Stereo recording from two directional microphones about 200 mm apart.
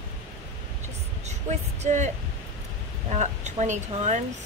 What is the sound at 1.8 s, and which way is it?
Speech, 35° right (ahead or behind).